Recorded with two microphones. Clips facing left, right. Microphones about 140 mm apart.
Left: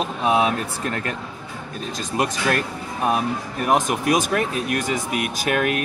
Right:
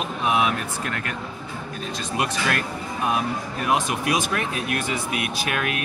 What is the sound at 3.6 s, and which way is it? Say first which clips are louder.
Speech: left 4 dB; 45° left (ahead or behind).